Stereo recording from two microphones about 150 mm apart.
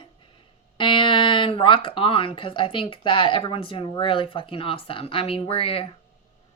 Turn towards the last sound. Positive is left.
turn(degrees=40)  # may be behind; listen again after turning